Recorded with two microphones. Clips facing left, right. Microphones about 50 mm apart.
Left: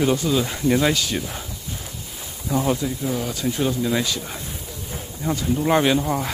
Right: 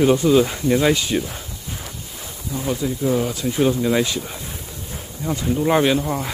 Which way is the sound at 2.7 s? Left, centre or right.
Centre.